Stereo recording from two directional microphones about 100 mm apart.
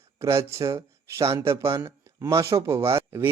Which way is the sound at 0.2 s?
30° right (ahead or behind).